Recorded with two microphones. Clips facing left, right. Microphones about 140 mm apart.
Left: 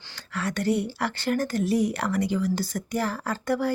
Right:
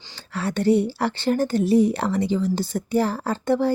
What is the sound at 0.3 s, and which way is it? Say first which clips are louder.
A woman's voice: right 6 dB; 30° right (ahead or behind).